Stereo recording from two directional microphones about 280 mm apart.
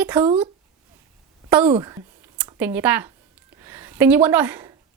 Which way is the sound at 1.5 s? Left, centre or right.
Centre.